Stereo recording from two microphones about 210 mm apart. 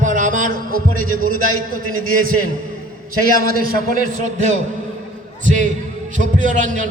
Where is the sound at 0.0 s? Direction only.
35° right (ahead or behind).